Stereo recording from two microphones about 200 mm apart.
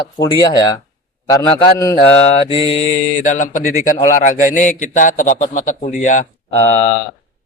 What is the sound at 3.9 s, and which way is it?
Speech, 15° left (ahead or behind).